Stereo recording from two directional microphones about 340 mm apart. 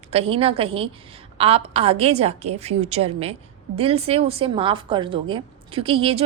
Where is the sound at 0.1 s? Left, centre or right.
Centre.